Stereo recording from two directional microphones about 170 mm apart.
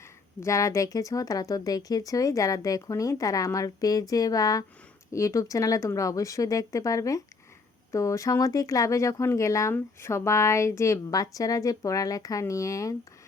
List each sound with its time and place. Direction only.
0.3 s speech: 15° left (ahead or behind)